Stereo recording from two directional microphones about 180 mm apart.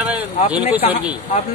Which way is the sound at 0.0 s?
5° right (ahead or behind).